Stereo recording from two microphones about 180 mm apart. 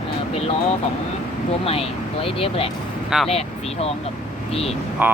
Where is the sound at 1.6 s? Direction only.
30° left (ahead or behind).